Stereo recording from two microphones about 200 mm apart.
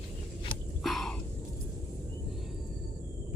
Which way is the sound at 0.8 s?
Centre (ahead or behind).